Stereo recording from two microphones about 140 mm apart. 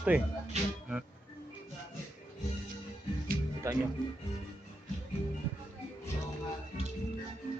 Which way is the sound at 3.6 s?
20° right (ahead or behind).